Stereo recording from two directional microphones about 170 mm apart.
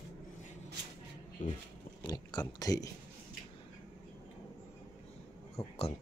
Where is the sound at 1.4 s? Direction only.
45° left (ahead or behind).